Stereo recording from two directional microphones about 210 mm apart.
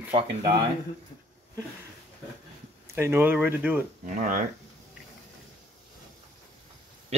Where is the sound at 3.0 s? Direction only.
10° right (ahead or behind).